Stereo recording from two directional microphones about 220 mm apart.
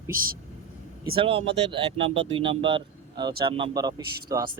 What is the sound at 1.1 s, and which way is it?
Speech, 25° right (ahead or behind).